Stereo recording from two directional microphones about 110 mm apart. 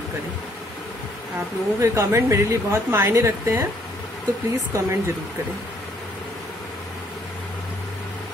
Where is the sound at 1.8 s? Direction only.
25° right (ahead or behind).